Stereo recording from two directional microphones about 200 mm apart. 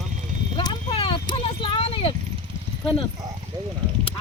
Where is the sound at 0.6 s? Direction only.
25° left (ahead or behind).